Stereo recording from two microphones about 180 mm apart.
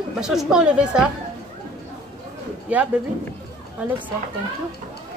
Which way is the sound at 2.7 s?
10° right (ahead or behind).